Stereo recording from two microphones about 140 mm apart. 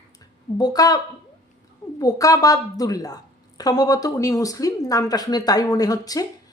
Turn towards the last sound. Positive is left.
turn(degrees=25)  # may be behind; listen again after turning